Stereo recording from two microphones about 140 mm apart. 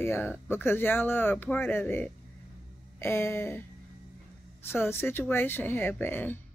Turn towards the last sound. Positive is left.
turn(degrees=15)  # may be behind; listen again after turning